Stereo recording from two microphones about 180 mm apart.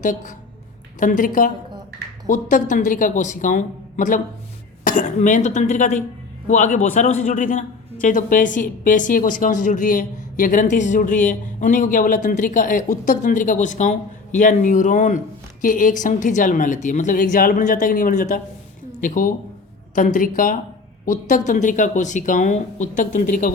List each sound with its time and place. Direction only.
0.0 s a man's voice: 45° left (ahead or behind)